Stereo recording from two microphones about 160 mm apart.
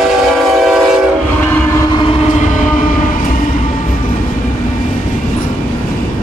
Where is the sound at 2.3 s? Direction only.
50° left (ahead or behind).